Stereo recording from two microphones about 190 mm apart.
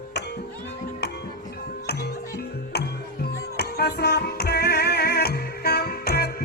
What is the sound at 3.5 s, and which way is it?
Music, 55° left (ahead or behind).